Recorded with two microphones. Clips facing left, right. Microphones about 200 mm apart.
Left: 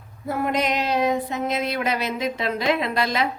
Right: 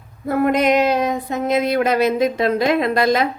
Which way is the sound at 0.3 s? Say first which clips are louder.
Right 7 dB; 55° right (ahead or behind).